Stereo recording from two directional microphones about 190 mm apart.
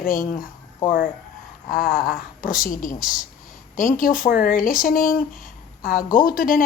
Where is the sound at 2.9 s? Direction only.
5° right (ahead or behind).